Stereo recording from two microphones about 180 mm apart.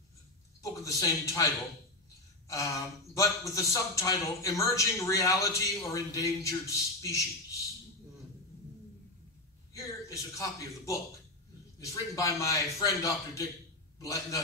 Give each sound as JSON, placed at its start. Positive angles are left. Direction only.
{"t": 0.6, "sound": "a man's voice", "side_deg": 20}
{"t": 9.8, "sound": "a man's voice", "side_deg": 20}